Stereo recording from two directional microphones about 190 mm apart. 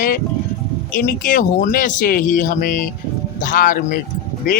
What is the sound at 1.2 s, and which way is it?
Speech, 45° left (ahead or behind).